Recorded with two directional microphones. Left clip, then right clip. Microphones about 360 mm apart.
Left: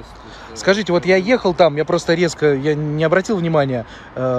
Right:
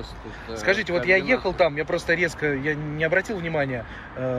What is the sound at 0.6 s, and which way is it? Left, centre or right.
Speech, centre.